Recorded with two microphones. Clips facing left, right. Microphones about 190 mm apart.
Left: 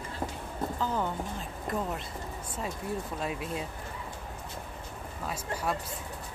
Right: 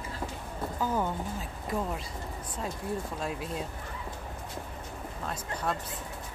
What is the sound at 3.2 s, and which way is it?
Speech, centre (ahead or behind).